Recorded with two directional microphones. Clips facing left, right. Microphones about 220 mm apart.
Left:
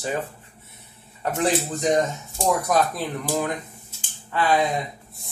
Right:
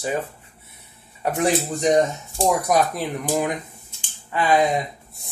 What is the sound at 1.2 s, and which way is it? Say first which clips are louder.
Speech: right 2 dB; 15° right (ahead or behind).